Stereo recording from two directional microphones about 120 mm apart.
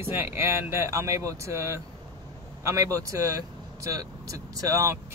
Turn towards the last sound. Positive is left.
turn(degrees=-30)  # may be behind; listen again after turning